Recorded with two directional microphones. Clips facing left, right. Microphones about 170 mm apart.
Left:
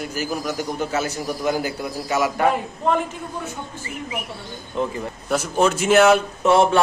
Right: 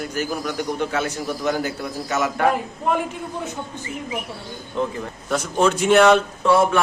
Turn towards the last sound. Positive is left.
turn(degrees=25)  # may be behind; listen again after turning